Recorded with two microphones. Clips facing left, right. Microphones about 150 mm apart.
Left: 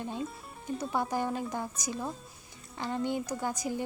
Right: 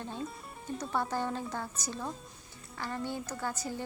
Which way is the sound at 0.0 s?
15° left (ahead or behind).